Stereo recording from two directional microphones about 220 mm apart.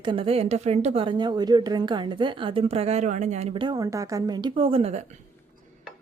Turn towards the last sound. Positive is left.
turn(degrees=-30)  # may be behind; listen again after turning